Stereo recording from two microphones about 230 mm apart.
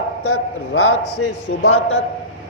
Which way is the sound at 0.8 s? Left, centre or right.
Left.